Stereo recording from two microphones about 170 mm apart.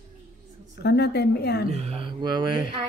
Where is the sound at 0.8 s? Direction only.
75° left (ahead or behind).